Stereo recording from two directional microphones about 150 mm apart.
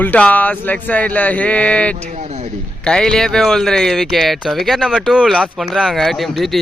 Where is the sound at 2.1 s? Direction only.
50° right (ahead or behind).